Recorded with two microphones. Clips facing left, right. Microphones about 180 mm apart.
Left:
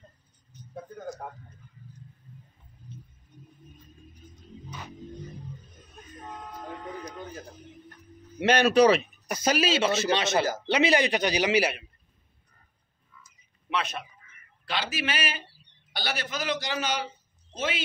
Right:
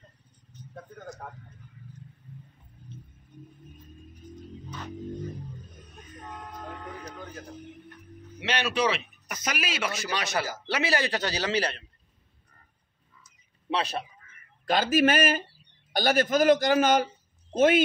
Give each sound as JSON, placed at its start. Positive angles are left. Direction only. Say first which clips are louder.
{"t": 4.6, "sound": "music", "louder": "right 2 dB", "side_deg": 10}
{"t": 8.4, "sound": "a man's voice", "louder": "left 8 dB", "side_deg": 45}
{"t": 13.7, "sound": "a man's voice", "louder": "right 2 dB", "side_deg": -35}
{"t": 14.7, "sound": "a man's voice", "louder": "right 9 dB", "side_deg": -50}